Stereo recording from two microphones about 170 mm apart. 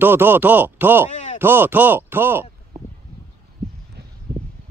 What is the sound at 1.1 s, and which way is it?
Chop, 45° left (ahead or behind).